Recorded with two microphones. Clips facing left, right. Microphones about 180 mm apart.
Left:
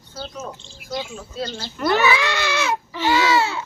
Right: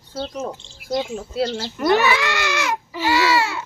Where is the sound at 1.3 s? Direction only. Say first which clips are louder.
Right 6 dB; 75° right (ahead or behind).